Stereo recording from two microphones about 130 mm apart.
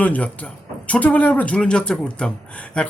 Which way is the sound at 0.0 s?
10° left (ahead or behind).